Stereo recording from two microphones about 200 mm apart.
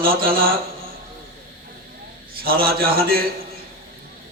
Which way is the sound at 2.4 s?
50° right (ahead or behind).